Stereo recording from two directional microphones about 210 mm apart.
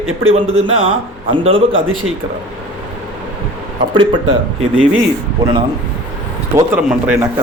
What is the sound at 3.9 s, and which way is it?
Speech, 25° right (ahead or behind).